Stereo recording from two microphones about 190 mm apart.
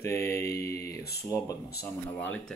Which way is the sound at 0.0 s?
15° left (ahead or behind).